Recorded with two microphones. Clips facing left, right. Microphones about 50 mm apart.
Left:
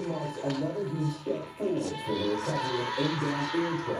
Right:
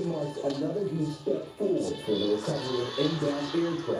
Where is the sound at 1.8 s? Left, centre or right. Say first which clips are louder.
Right 2 dB; left.